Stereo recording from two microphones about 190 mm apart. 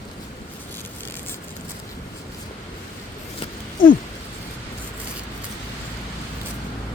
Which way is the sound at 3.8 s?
50° left (ahead or behind).